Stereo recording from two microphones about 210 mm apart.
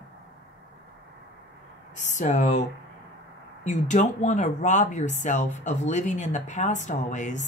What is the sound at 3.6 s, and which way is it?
Speech, 35° left (ahead or behind).